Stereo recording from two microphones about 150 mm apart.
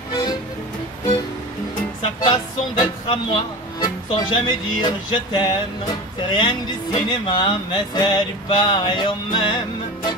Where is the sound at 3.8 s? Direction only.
30° left (ahead or behind).